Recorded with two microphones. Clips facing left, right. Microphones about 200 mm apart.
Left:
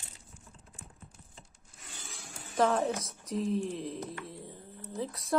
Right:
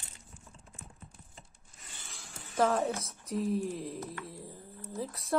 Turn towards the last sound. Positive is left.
turn(degrees=0)  # may be behind; listen again after turning